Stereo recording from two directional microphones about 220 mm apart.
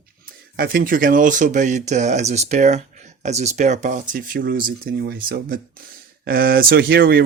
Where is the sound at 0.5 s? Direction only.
45° right (ahead or behind).